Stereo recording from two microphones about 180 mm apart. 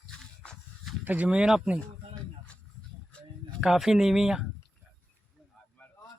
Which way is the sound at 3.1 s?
Centre (ahead or behind).